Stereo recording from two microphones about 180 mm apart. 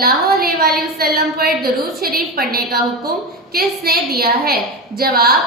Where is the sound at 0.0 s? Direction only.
55° right (ahead or behind).